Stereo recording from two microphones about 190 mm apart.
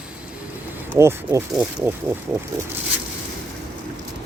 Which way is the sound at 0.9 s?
15° right (ahead or behind).